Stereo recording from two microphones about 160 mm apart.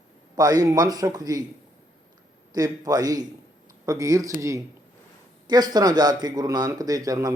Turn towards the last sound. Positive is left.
turn(degrees=-20)  # may be behind; listen again after turning